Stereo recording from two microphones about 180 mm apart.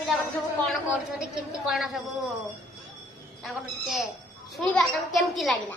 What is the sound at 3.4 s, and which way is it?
A woman's voice, centre (ahead or behind).